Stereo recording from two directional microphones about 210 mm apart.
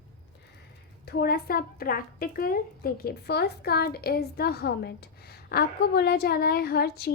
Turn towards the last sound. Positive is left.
turn(degrees=50)  # may be behind; listen again after turning